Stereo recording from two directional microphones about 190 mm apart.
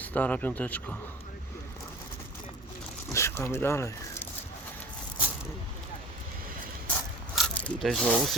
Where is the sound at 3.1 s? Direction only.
15° left (ahead or behind).